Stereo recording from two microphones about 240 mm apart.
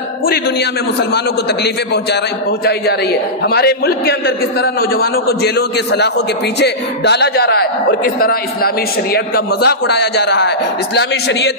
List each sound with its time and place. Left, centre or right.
2.6 s a man's voice: left